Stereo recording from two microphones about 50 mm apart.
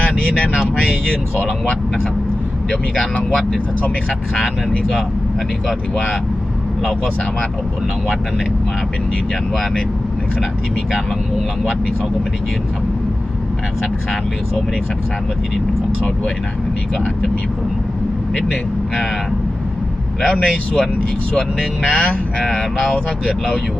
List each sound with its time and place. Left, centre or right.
0.0 s speech: centre
2.6 s speech: centre
20.2 s speech: centre
21.8 s speech: centre